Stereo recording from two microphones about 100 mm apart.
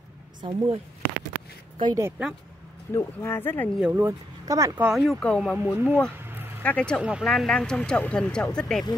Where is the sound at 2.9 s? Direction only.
25° left (ahead or behind).